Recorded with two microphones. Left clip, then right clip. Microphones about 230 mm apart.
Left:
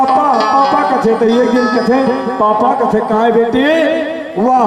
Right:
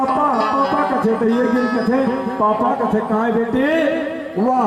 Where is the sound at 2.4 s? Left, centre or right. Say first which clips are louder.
Left 5 dB; centre.